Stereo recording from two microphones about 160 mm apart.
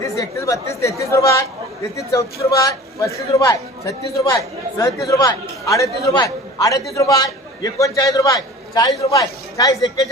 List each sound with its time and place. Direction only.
0.0 s a man's voice: 20° left (ahead or behind)